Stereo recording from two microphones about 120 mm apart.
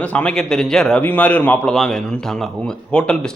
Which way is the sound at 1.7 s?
Centre (ahead or behind).